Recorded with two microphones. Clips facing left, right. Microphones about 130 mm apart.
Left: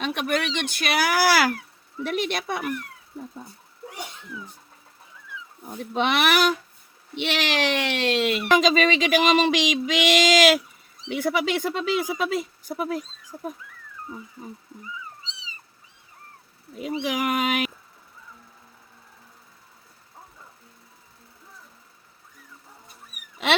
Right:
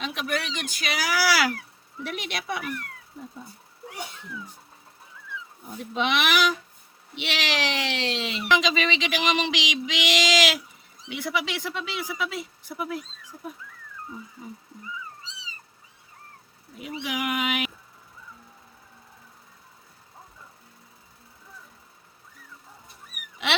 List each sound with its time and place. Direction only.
0.0 s speech: 60° left (ahead or behind)
5.9 s speech: 50° left (ahead or behind)
16.8 s speech: 45° left (ahead or behind)